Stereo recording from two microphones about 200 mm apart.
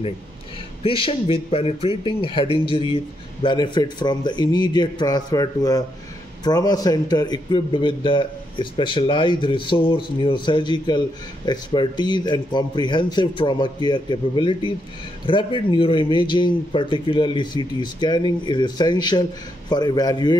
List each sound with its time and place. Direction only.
0.8 s a man's voice: 25° left (ahead or behind)